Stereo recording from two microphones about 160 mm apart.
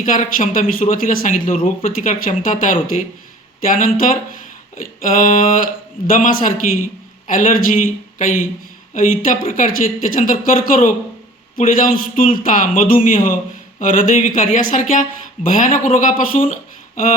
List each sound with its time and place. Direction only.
0.0 s a man's voice: 55° left (ahead or behind)